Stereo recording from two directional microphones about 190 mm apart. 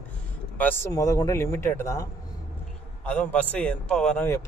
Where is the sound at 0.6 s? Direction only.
10° left (ahead or behind).